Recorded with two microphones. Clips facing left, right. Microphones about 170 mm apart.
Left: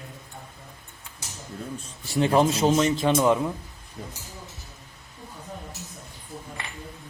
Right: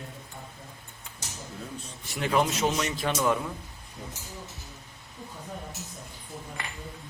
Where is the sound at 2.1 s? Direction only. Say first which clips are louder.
Left 6 dB; 30° left (ahead or behind).